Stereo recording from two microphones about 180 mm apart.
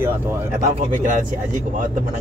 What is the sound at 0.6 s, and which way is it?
Speech, 45° right (ahead or behind).